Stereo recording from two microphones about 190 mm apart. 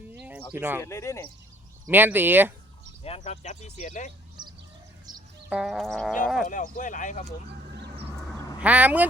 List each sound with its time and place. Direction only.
0.1 s a sound: 10° right (ahead or behind)
0.8 s speech: 15° left (ahead or behind)
1.9 s speech: 10° right (ahead or behind)
3.0 s speech: 30° left (ahead or behind)
5.5 s a sound: centre (ahead or behind)
6.5 s speech: 40° left (ahead or behind)
8.6 s speech: 10° right (ahead or behind)